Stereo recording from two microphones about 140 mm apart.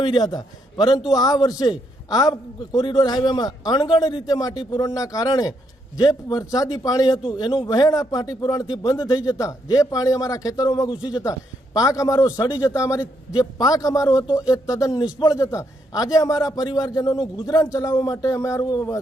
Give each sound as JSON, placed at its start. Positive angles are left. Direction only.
{"t": 0.0, "sound": "a man's voice", "side_deg": 35}